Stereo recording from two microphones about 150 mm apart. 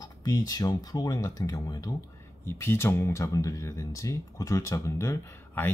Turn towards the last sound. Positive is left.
turn(degrees=15)  # may be behind; listen again after turning